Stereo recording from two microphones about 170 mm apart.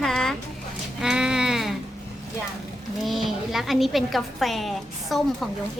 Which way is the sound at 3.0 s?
Centre (ahead or behind).